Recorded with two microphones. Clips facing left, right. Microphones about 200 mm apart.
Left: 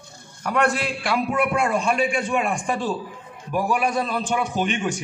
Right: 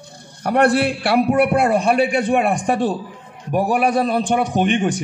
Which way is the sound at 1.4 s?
35° right (ahead or behind).